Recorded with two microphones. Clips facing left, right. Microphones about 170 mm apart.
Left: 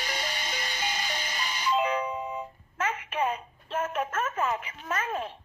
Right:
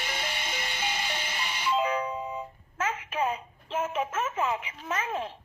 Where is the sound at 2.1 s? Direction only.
10° right (ahead or behind).